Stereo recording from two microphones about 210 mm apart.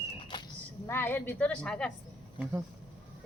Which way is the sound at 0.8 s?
10° left (ahead or behind).